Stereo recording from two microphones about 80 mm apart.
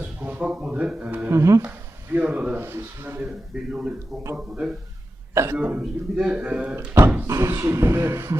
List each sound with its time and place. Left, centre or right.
0.0 s a sound: right
1.3 s speech: right
1.6 s a sound: right
2.6 s speech: right
3.2 s a man's voice: centre
5.3 s speech: right
5.5 s a man's voice: centre
7.3 s speech: right